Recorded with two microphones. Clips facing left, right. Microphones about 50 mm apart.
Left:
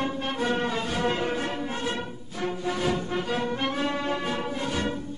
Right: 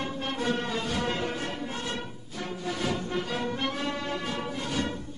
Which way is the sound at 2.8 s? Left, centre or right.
Centre.